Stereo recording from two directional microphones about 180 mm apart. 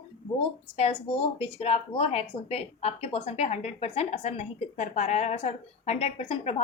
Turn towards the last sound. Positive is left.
turn(degrees=35)  # may be behind; listen again after turning